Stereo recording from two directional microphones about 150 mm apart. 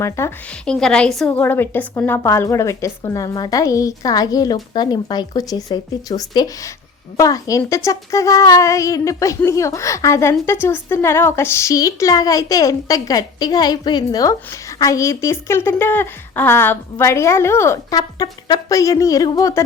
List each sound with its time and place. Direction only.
0.0 s a woman's voice: 15° left (ahead or behind)
0.6 s a woman's voice: 5° left (ahead or behind); by 19.6 s 25° left (ahead or behind)